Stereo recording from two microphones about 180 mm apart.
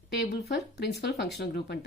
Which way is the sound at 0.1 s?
65° left (ahead or behind).